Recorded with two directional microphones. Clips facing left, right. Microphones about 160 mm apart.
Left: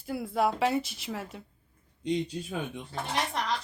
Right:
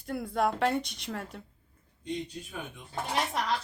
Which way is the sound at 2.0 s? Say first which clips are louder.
Left 6 dB; 90° left.